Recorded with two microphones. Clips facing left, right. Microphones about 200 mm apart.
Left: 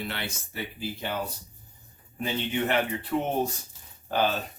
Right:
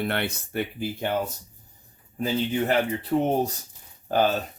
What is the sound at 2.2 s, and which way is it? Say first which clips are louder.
Speech: right 4 dB; 35° right (ahead or behind).